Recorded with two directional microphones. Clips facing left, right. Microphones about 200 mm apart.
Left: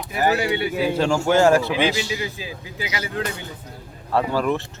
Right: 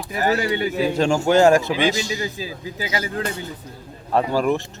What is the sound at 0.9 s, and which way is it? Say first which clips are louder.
Speech: right 1 dB; 15° right (ahead or behind).